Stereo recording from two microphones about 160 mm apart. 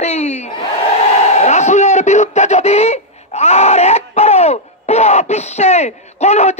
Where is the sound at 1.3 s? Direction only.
45° left (ahead or behind).